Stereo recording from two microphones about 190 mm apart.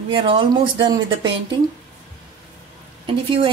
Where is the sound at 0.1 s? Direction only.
25° right (ahead or behind).